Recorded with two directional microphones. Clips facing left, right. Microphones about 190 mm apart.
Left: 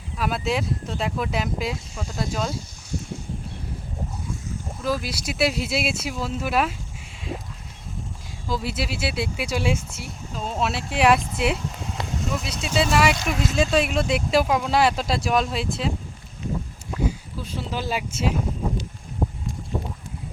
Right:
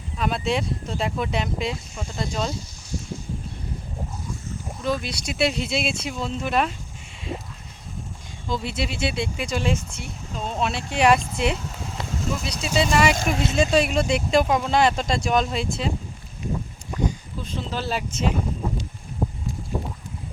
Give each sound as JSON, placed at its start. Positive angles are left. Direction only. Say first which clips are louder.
{"t": 0.2, "sound": "speech", "louder": "right 1 dB", "side_deg": 5}
{"t": 4.8, "sound": "speech", "louder": "even", "side_deg": 5}
{"t": 8.4, "sound": "speech", "louder": "even", "side_deg": 5}
{"t": 13.3, "sound": "speech", "louder": "right 1 dB", "side_deg": -25}
{"t": 13.6, "sound": "speech", "louder": "right 1 dB", "side_deg": 0}
{"t": 17.0, "sound": "a sound", "louder": "even", "side_deg": 5}